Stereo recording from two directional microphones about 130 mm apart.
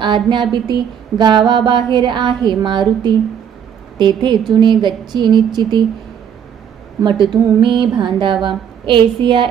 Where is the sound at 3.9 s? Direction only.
35° right (ahead or behind).